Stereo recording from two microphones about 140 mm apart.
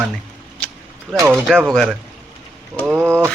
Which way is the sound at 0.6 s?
5° left (ahead or behind).